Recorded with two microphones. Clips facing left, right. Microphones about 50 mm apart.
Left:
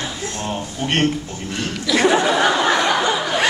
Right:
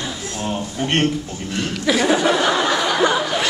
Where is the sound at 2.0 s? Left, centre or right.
Left.